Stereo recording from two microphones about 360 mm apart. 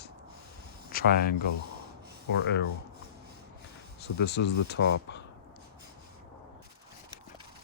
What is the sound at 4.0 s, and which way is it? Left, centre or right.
Speech, left.